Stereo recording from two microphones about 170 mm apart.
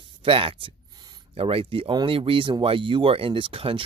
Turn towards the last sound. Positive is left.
turn(degrees=-35)  # may be behind; listen again after turning